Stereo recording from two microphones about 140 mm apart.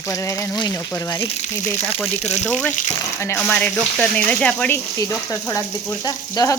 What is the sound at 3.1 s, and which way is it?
Speech, 20° left (ahead or behind).